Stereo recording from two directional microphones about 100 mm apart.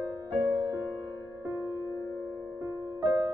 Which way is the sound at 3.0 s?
40° right (ahead or behind).